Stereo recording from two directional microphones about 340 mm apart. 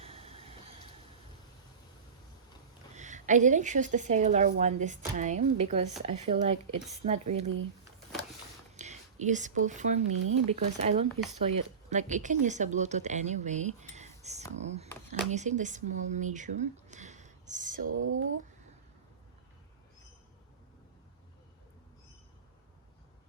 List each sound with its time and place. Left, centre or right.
0.0 s a sound: centre
2.9 s speech: right
8.7 s speech: right
17.8 s speech: right